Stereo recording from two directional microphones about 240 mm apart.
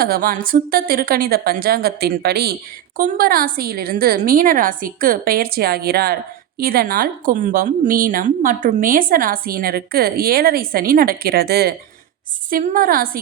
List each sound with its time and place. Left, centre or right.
0.0 s a woman's voice: right